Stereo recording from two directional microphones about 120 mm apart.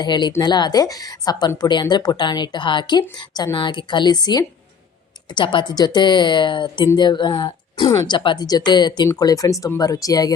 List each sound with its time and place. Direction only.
0.0 s speech: 40° left (ahead or behind)